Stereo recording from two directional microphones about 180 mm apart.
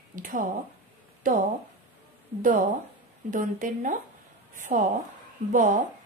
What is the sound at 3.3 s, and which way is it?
Speech, 45° right (ahead or behind).